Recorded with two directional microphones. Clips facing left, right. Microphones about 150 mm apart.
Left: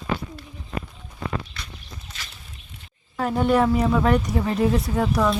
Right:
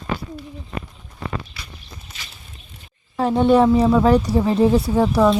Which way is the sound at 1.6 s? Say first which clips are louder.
Even; 5° right (ahead or behind).